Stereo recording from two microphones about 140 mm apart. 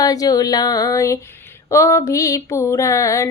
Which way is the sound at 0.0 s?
25° left (ahead or behind).